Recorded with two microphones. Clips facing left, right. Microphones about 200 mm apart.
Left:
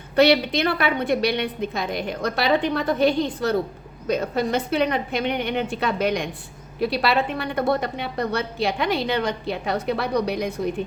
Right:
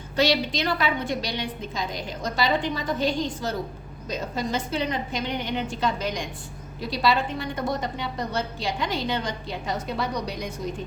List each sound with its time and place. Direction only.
0.2 s a woman's voice: 60° left (ahead or behind)